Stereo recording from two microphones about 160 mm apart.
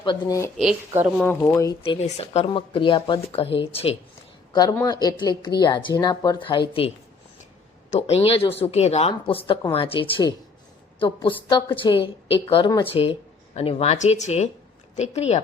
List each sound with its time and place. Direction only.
0.0 s speech: 30° left (ahead or behind)
0.5 s speech: 5° right (ahead or behind)
1.2 s speech: 15° left (ahead or behind)
1.8 s speech: 40° left (ahead or behind)
4.7 s speech: 20° left (ahead or behind); by 15.4 s 45° left (ahead or behind)